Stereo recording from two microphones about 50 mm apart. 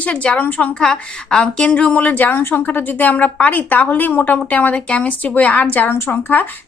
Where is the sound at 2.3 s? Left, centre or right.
Left.